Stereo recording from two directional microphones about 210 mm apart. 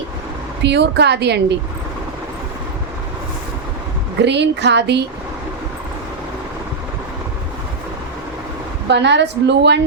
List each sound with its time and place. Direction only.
0.6 s a woman's voice: 55° right (ahead or behind)
4.2 s a woman's voice: 55° right (ahead or behind)
8.9 s a woman's voice: 55° right (ahead or behind)